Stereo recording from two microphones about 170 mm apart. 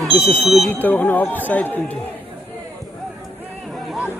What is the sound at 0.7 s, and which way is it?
Speech, 10° left (ahead or behind).